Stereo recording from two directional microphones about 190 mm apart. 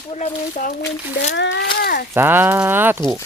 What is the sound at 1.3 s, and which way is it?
Speech, 65° left (ahead or behind).